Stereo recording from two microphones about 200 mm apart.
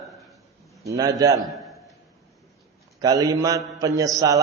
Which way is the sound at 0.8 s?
20° right (ahead or behind).